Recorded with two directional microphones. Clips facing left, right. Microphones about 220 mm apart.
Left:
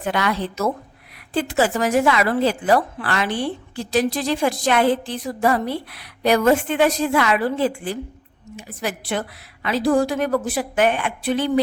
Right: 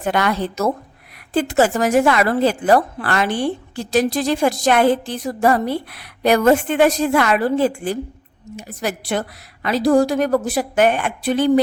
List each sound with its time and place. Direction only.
0.0 s a woman's voice: 45° right (ahead or behind)